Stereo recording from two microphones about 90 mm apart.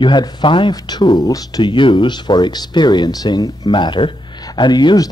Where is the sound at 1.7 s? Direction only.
65° left (ahead or behind); by 3.7 s 45° left (ahead or behind).